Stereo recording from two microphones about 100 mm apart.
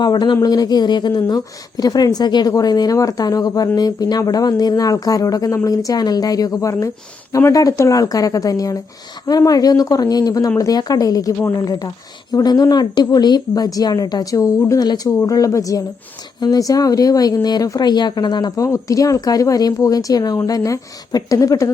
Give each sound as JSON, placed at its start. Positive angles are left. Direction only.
{"t": 0.0, "sound": "a woman's voice", "side_deg": 45}